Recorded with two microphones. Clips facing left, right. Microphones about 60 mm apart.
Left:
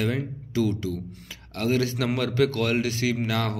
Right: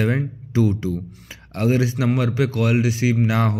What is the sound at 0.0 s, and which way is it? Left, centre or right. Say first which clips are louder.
Speech: right 5 dB; right.